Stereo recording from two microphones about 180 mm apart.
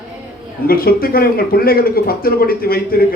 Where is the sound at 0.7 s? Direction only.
55° left (ahead or behind).